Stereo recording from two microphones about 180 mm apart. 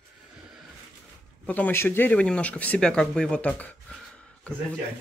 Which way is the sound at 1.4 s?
10° left (ahead or behind).